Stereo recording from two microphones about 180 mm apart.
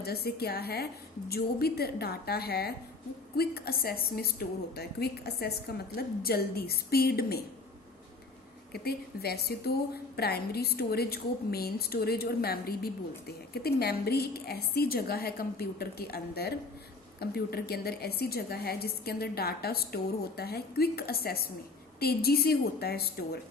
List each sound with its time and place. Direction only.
0.0 s a woman's voice: 60° left (ahead or behind)
8.7 s a woman's voice: 60° left (ahead or behind)